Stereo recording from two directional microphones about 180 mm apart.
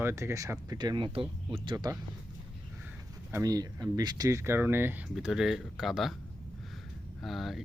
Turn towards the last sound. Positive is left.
turn(degrees=0)  # may be behind; listen again after turning